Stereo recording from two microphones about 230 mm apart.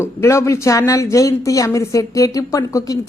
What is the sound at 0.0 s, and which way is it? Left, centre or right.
Speech, centre.